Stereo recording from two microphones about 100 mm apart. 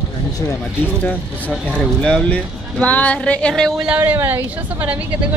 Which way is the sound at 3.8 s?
15° right (ahead or behind).